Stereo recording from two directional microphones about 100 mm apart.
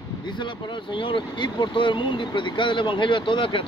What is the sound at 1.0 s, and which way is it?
Speech, 55° left (ahead or behind).